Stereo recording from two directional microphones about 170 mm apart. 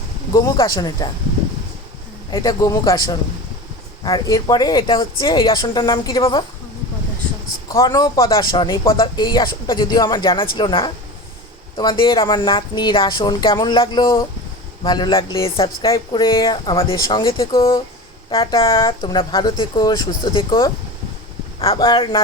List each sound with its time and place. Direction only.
0.3 s a woman's voice: 20° left (ahead or behind)
2.3 s a woman's voice: 20° left (ahead or behind)
7.7 s a woman's voice: 20° left (ahead or behind)